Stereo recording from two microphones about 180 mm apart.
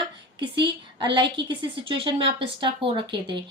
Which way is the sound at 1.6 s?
30° right (ahead or behind).